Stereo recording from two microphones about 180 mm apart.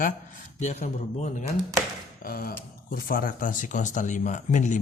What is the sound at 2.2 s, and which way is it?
Speech, 55° left (ahead or behind).